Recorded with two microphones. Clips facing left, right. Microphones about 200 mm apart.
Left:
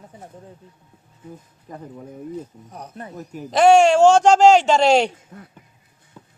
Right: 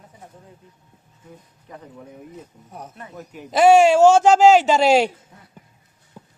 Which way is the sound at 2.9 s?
40° left (ahead or behind).